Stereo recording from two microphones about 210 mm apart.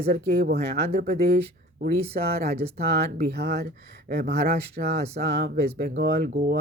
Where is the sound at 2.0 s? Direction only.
30° right (ahead or behind).